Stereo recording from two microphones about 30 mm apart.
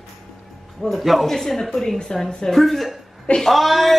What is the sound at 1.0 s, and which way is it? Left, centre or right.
A woman's voice, centre.